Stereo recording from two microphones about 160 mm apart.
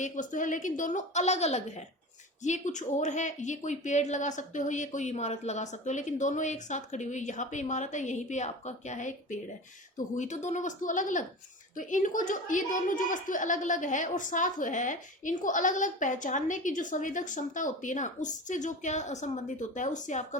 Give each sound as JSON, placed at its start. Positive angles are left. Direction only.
{"t": 0.0, "sound": "a woman's voice", "side_deg": 50}